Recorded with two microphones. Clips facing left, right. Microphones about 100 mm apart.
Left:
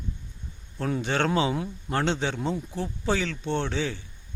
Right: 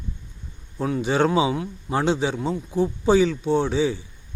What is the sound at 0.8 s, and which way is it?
A man's voice, 5° right (ahead or behind).